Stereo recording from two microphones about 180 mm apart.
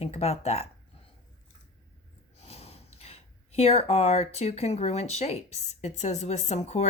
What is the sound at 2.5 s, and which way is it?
Speech, 35° left (ahead or behind).